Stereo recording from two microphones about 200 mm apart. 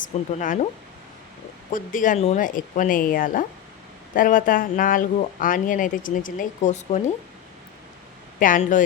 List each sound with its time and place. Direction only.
0.3 s speech: 40° left (ahead or behind)
1.7 s speech: 40° left (ahead or behind)
8.4 s speech: 40° left (ahead or behind)